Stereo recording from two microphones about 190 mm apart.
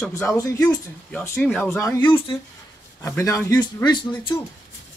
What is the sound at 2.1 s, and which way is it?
Speech, 25° left (ahead or behind).